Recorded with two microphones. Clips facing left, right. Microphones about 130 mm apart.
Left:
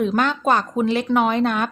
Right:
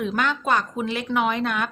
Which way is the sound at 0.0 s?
35° left (ahead or behind).